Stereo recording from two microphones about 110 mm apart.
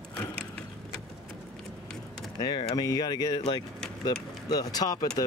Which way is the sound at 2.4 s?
40° left (ahead or behind).